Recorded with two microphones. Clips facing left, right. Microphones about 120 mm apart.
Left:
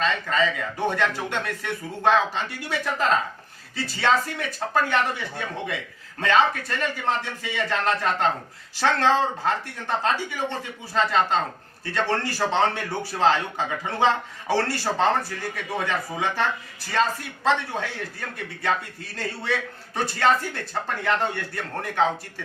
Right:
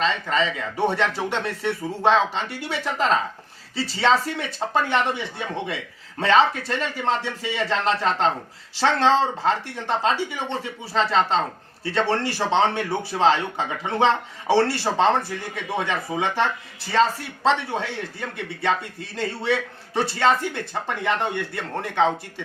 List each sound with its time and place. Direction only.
0.0 s a man's voice: 25° right (ahead or behind)